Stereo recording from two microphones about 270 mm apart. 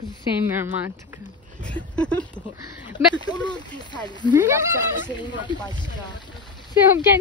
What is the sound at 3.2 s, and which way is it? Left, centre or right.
Speech, centre.